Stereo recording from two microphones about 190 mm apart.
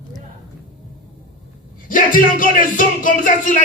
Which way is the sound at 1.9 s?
45° left (ahead or behind).